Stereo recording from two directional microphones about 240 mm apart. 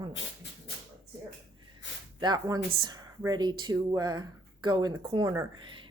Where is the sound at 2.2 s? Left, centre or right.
Centre.